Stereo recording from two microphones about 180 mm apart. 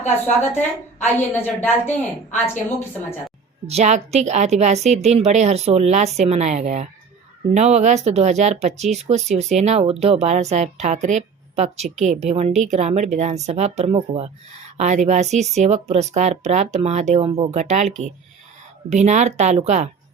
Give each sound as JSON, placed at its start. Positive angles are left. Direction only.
{"t": 0.5, "sound": "a woman's voice", "side_deg": 10}
{"t": 3.7, "sound": "speech", "side_deg": -35}
{"t": 18.9, "sound": "speech", "side_deg": -40}